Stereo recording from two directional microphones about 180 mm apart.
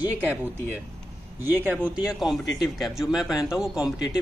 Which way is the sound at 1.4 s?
10° right (ahead or behind).